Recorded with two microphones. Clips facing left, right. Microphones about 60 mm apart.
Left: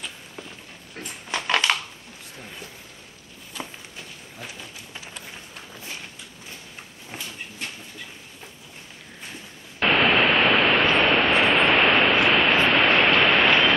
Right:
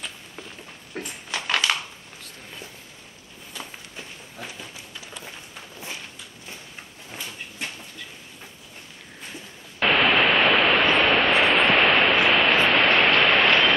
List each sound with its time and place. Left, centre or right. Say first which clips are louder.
1.3 s crushing: left 2 dB; left
3.9 s walk: right 1 dB; centre
9.8 s static: even; centre
12.6 s a sound: even; centre